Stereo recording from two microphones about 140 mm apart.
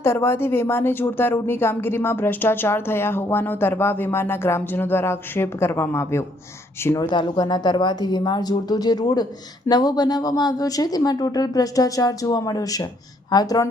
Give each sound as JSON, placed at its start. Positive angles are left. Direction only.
{"t": 0.0, "sound": "a woman's voice", "side_deg": 20}